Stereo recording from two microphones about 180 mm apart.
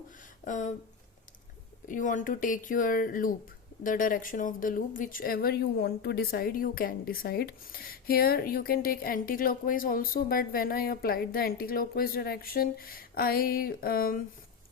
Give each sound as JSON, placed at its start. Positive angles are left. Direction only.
{"t": 0.4, "sound": "speech", "side_deg": 45}
{"t": 1.9, "sound": "a woman's voice", "side_deg": 45}